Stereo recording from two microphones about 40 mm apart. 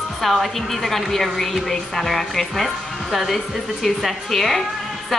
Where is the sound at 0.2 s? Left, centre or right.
Centre.